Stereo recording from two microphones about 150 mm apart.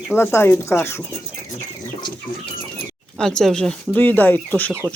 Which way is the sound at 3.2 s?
5° left (ahead or behind).